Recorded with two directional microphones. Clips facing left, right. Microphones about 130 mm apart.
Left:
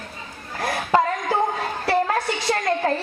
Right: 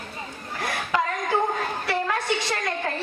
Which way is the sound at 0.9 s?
40° left (ahead or behind).